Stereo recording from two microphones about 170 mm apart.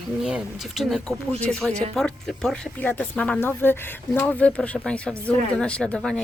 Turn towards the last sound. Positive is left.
turn(degrees=5)  # may be behind; listen again after turning